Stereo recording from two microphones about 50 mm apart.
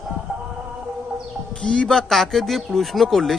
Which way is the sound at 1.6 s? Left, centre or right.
Left.